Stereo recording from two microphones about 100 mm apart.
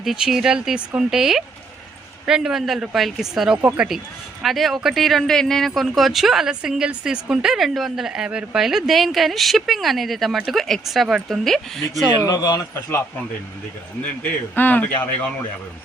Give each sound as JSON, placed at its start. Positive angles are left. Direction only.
{"t": 0.0, "sound": "speech", "side_deg": -5}
{"t": 12.2, "sound": "speech", "side_deg": 35}
{"t": 14.3, "sound": "a man's voice", "side_deg": 20}